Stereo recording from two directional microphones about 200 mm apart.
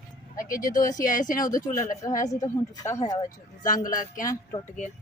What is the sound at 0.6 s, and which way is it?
Speech, 40° left (ahead or behind).